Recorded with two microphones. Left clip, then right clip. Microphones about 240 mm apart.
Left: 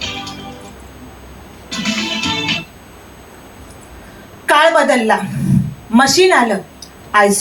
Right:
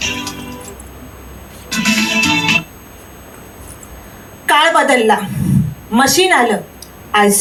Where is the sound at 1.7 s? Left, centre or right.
Left.